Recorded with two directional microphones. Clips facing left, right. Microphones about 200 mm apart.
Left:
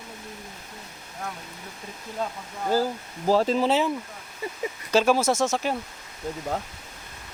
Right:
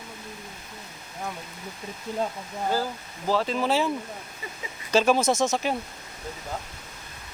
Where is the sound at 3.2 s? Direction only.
40° left (ahead or behind).